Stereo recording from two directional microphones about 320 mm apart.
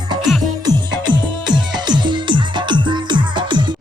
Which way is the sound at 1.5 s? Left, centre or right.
Centre.